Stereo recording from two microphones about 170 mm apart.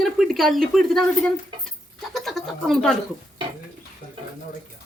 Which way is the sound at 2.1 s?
Centre (ahead or behind).